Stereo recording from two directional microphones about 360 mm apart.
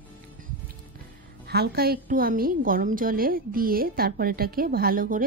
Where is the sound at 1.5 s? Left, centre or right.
Right.